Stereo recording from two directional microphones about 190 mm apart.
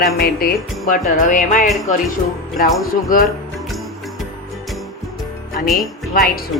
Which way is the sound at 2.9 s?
45° left (ahead or behind).